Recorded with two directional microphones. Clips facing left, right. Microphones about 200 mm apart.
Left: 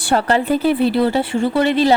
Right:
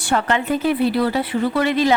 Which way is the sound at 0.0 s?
35° left (ahead or behind).